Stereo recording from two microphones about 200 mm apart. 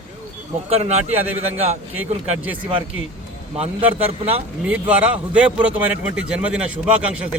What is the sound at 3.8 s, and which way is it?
A man's voice, 10° right (ahead or behind).